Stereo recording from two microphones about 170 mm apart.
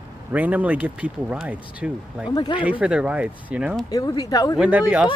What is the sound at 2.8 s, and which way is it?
Speech, 5° right (ahead or behind).